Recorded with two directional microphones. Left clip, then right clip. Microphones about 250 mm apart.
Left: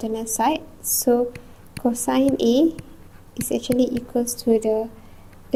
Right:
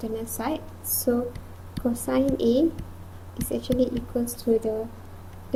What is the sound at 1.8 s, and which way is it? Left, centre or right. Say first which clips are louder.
A woman's voice: left 4 dB; left.